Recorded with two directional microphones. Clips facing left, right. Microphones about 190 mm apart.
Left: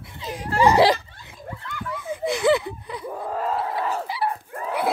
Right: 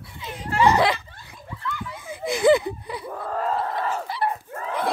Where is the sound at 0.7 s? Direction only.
30° left (ahead or behind).